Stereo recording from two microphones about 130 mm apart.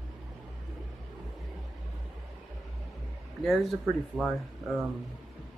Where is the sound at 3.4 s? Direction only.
Centre (ahead or behind).